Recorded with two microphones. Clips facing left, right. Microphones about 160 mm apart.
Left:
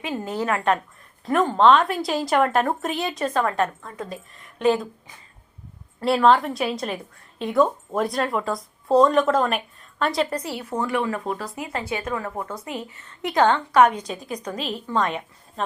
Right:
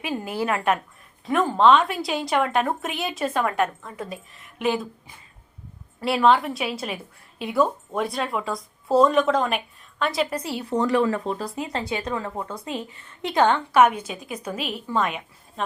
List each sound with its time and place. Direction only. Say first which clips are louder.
0.1 s a woman's voice: even; 10° right (ahead or behind)
1.2 s speech: left 1 dB; centre (ahead or behind)
6.0 s speech: left 2 dB; centre (ahead or behind)
10.6 s speech: right 5 dB; 35° right (ahead or behind)
11.3 s speech: right 2 dB; 20° right (ahead or behind)
12.4 s speech: left 1 dB; 10° left (ahead or behind)
13.2 s a woman's voice: left 1 dB; 15° right (ahead or behind)